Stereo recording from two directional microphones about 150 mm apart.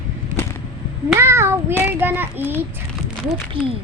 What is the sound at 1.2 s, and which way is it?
Child singing, 15° right (ahead or behind).